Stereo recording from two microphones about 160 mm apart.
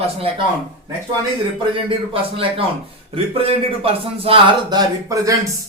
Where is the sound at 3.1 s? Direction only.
35° right (ahead or behind).